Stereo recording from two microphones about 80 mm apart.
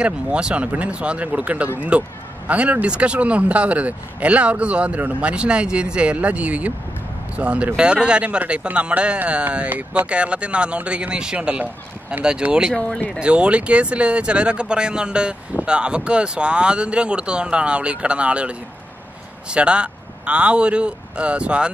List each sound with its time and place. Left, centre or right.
0.0 s speech: centre
12.7 s speech: centre
13.2 s speech: centre